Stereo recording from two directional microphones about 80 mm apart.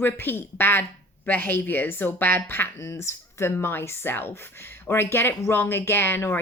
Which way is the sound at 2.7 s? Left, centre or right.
Left.